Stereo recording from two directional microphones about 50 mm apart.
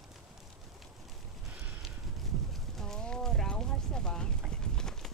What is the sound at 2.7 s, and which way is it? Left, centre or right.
Clip-clop, centre.